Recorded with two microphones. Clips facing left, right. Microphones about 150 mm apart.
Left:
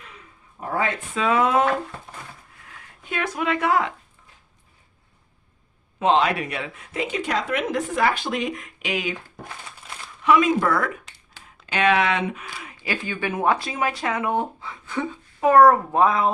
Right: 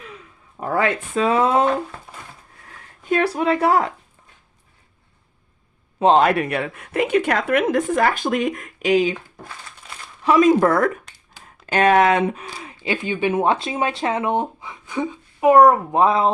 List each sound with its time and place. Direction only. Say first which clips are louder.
0.5 s speech: right 4 dB; 85° right
1.1 s speech: right 2 dB; 35° right (ahead or behind)
2.6 s a sound: right 12 dB; 40° right (ahead or behind)
6.0 s a woman's voice: right 5 dB; 40° right (ahead or behind)
9.8 s crumpling: even; centre (ahead or behind)
10.2 s speech: right 4 dB; 40° right (ahead or behind)